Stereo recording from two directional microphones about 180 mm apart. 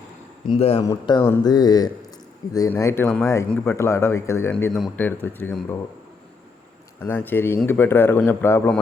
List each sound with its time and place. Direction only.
0.4 s a man's voice: 35° left (ahead or behind)
0.8 s speech: 20° left (ahead or behind)
7.0 s speech: 10° left (ahead or behind)